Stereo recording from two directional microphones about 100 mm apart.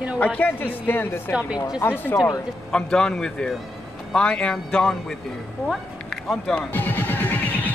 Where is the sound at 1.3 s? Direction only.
10° right (ahead or behind).